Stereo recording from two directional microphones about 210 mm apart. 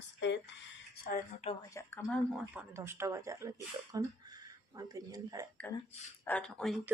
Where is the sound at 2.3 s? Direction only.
10° right (ahead or behind).